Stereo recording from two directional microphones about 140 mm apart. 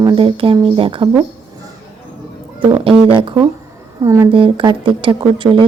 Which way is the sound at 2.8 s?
40° right (ahead or behind).